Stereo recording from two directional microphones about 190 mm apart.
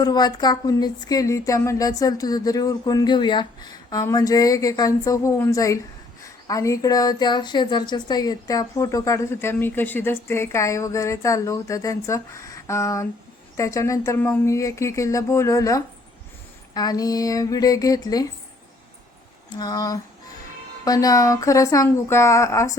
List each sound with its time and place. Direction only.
0.0 s speech: 20° left (ahead or behind)
19.5 s speech: 20° left (ahead or behind)